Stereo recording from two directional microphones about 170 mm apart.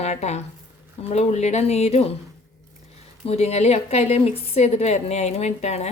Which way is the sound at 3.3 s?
40° left (ahead or behind).